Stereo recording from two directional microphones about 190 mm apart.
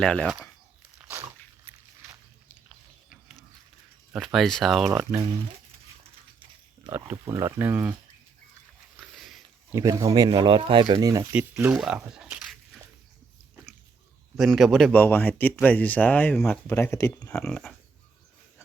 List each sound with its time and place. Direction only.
0.0 s speech: 5° left (ahead or behind)
4.1 s speech: centre (ahead or behind)
6.9 s speech: 15° right (ahead or behind)
9.0 s sniff: centre (ahead or behind)
9.7 s speech: 15° right (ahead or behind)
11.3 s speech: 5° right (ahead or behind)
13.7 s drip: centre (ahead or behind)
14.3 s speech: centre (ahead or behind); by 17.3 s 20° left (ahead or behind)
17.3 s speech: 5° left (ahead or behind)